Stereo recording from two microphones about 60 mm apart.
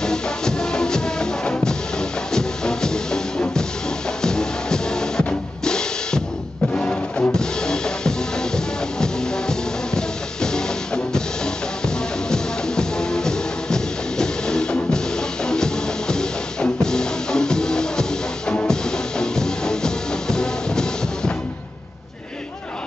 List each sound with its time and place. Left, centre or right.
0.0 s music: centre
5.6 s drum kit: centre
6.7 s music: left
7.3 s music: centre